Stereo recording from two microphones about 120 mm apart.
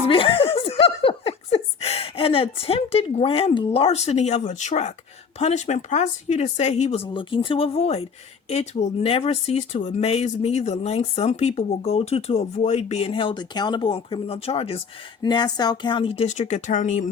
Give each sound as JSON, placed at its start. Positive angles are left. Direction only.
{"t": 0.1, "sound": "laughter", "side_deg": 50}
{"t": 5.4, "sound": "speech", "side_deg": 65}
{"t": 15.2, "sound": "speech", "side_deg": 35}